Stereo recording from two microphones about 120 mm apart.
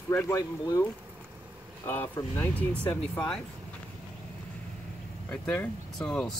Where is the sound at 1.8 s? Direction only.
20° left (ahead or behind).